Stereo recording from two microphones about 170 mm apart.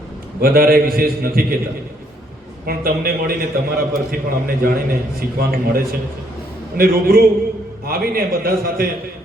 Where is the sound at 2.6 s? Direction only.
60° right (ahead or behind).